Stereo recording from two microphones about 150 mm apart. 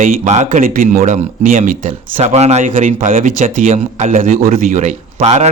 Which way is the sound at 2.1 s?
45° right (ahead or behind).